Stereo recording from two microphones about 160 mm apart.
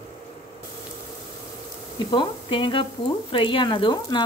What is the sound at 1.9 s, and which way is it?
Speech, 30° left (ahead or behind).